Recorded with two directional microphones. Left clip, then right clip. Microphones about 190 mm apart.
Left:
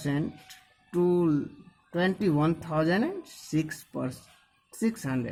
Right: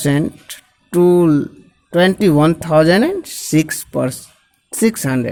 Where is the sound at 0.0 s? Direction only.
40° right (ahead or behind).